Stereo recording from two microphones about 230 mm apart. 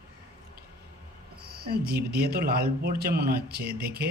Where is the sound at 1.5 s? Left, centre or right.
Right.